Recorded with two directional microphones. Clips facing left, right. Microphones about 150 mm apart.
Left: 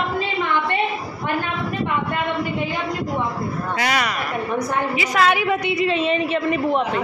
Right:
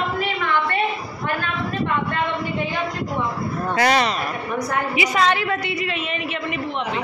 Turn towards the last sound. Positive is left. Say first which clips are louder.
# left 5 dB
turn(degrees=25)  # may be behind; listen again after turning